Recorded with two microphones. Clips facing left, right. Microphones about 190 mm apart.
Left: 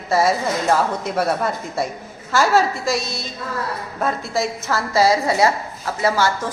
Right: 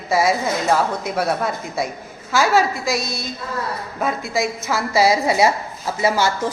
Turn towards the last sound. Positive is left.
turn(degrees=-20)  # may be behind; listen again after turning